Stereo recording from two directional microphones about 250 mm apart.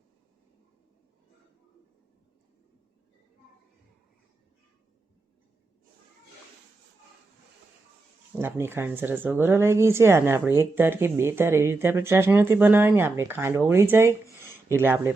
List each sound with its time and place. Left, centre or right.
8.4 s speech: centre